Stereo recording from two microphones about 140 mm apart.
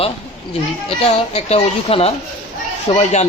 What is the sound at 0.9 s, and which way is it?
Speech, 45° left (ahead or behind).